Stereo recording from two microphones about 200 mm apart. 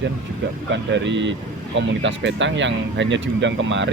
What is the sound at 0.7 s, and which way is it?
Speech, 65° right (ahead or behind).